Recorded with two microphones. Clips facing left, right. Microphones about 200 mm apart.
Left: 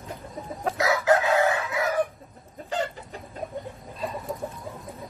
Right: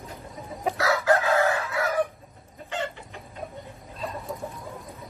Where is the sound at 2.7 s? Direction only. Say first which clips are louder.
Left 3 dB; 35° left (ahead or behind).